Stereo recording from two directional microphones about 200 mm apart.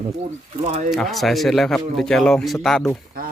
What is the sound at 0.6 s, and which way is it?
Speech, 35° right (ahead or behind).